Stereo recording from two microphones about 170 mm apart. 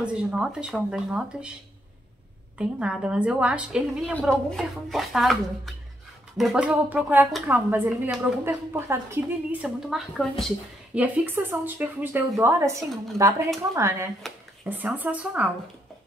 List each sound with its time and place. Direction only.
0.0 s speech: 5° right (ahead or behind)
2.6 s a woman's voice: 5° right (ahead or behind)
11.0 s a woman's voice: 10° right (ahead or behind)
14.2 s speech: centre (ahead or behind)
14.7 s a woman's voice: 10° right (ahead or behind)